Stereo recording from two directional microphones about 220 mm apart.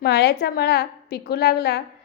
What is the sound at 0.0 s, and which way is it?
A woman's voice, 45° left (ahead or behind).